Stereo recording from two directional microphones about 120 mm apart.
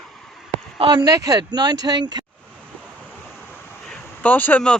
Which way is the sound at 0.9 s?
35° right (ahead or behind).